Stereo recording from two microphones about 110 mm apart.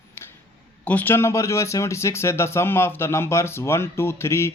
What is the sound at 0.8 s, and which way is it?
Speech, 15° left (ahead or behind).